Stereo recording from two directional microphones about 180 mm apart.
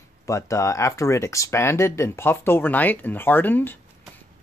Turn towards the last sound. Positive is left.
turn(degrees=10)  # may be behind; listen again after turning